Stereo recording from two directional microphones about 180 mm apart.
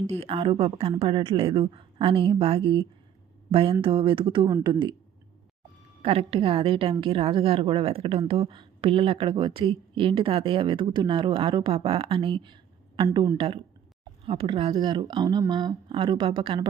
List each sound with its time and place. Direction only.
0.1 s a woman's voice: 35° right (ahead or behind)
6.0 s a woman's voice: 30° right (ahead or behind)
13.3 s a woman's voice: 30° right (ahead or behind)